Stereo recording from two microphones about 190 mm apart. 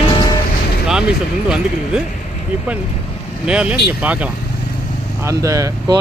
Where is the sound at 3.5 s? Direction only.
5° right (ahead or behind).